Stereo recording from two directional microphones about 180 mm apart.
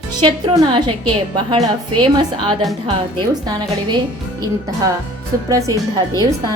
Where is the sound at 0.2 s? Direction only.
25° right (ahead or behind).